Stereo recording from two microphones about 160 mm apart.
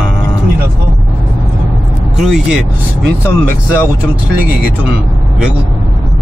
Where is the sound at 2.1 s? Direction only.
5° right (ahead or behind).